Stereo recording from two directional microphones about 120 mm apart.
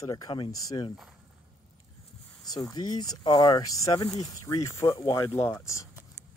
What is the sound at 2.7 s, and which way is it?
Speech, 35° left (ahead or behind).